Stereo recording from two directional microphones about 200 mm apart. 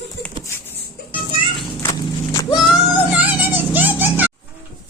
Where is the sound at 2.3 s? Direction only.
20° left (ahead or behind).